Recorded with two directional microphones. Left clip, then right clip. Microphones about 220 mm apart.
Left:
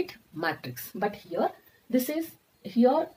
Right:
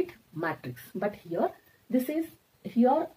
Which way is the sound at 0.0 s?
20° left (ahead or behind).